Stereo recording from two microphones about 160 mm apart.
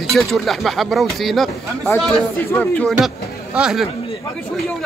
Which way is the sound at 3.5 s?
5° right (ahead or behind).